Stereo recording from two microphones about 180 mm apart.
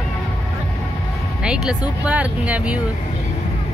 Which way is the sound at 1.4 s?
5° right (ahead or behind).